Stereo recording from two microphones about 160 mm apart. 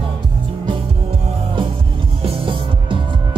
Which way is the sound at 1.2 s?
35° right (ahead or behind).